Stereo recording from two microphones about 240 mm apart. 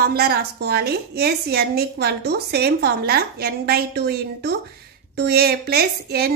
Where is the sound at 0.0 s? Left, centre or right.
Right.